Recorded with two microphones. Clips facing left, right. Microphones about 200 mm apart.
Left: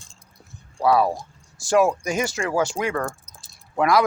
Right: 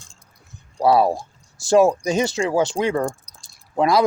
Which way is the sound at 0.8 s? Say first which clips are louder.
Right 3 dB; 30° right (ahead or behind).